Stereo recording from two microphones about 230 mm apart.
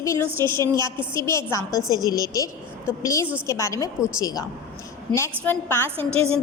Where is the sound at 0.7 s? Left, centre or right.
Centre.